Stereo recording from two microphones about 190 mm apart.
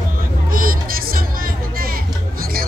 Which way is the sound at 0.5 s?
50° right (ahead or behind).